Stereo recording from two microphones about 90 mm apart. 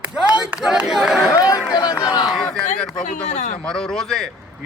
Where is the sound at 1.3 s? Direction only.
45° left (ahead or behind).